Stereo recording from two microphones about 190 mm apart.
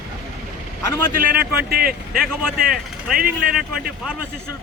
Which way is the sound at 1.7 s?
50° right (ahead or behind).